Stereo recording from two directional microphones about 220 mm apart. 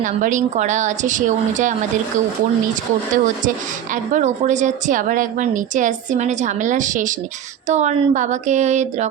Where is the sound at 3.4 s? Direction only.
35° right (ahead or behind).